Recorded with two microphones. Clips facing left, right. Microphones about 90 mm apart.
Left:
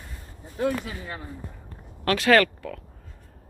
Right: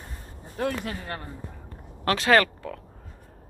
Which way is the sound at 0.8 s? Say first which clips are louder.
Right 2 dB; 65° right (ahead or behind).